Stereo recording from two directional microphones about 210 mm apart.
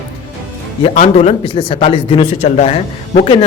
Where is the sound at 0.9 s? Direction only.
35° left (ahead or behind).